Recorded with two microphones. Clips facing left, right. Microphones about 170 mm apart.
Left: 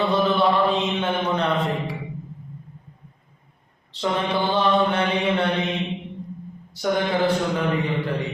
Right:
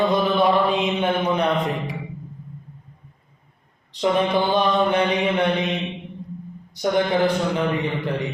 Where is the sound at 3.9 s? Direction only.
15° right (ahead or behind).